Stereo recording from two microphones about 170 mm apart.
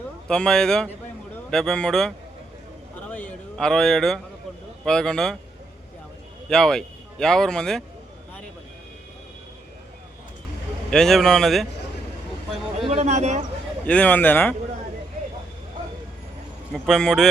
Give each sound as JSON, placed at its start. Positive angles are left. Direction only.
{"t": 0.3, "sound": "a man's voice", "side_deg": 5}
{"t": 3.1, "sound": "a sound", "side_deg": 10}
{"t": 4.9, "sound": "a man's voice", "side_deg": 5}
{"t": 6.5, "sound": "speech", "side_deg": 5}
{"t": 10.9, "sound": "a man's voice", "side_deg": 0}
{"t": 12.8, "sound": "speech", "side_deg": -40}
{"t": 13.8, "sound": "a man's voice", "side_deg": 10}
{"t": 16.7, "sound": "a man's voice", "side_deg": 0}